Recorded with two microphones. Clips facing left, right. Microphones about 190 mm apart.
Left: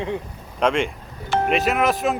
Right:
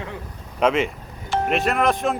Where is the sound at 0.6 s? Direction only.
5° right (ahead or behind).